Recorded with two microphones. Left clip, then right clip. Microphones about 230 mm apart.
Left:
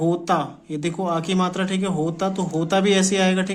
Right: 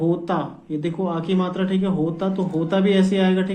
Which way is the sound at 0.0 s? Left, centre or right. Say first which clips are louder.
Left 2 dB; left.